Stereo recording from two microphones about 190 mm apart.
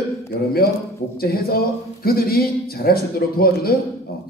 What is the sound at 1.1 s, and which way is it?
Speech, 55° left (ahead or behind).